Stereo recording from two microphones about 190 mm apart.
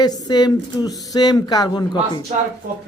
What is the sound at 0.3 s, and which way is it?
Speech, 20° left (ahead or behind).